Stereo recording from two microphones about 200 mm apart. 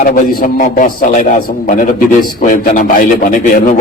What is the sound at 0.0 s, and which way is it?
A man's voice, 45° left (ahead or behind).